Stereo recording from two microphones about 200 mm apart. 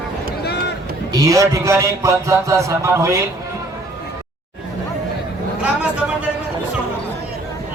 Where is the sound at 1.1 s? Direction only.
15° right (ahead or behind).